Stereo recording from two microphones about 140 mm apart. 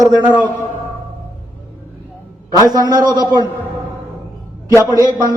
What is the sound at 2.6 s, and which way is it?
Speech, 30° right (ahead or behind).